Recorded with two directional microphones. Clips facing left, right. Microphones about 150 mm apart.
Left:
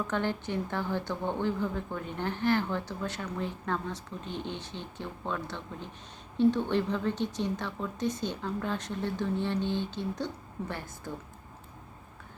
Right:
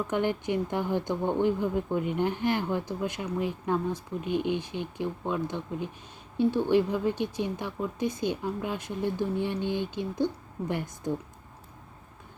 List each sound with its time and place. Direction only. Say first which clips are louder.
0.1 s speech: right 4 dB; 15° right (ahead or behind)